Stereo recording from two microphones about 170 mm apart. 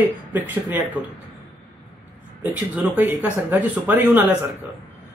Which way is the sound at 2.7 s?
10° right (ahead or behind).